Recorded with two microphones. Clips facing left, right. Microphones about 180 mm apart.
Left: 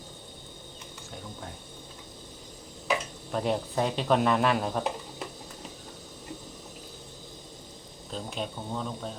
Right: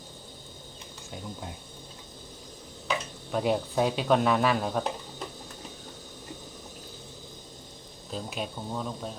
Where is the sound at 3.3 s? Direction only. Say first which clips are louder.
Right 2 dB; centre (ahead or behind).